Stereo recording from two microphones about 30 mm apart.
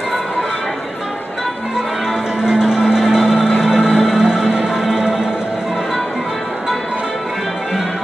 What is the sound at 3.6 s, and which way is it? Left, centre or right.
Music, right.